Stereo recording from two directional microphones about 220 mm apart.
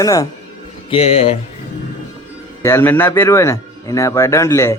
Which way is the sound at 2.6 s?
10° left (ahead or behind).